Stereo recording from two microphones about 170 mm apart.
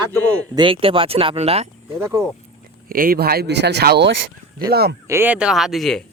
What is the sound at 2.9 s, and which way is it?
Speech, 60° right (ahead or behind).